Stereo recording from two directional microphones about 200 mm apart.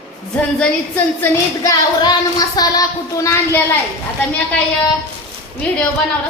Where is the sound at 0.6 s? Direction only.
10° left (ahead or behind).